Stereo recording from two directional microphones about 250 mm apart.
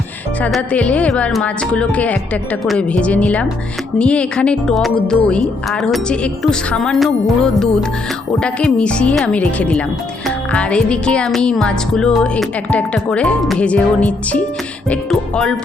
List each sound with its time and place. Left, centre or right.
0.4 s music: centre